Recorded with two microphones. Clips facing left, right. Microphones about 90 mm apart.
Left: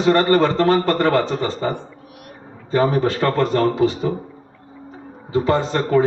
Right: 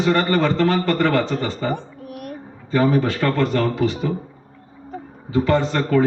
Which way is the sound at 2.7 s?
35° left (ahead or behind).